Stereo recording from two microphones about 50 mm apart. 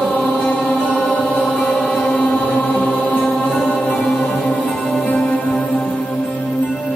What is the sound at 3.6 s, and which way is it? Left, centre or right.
Music, centre.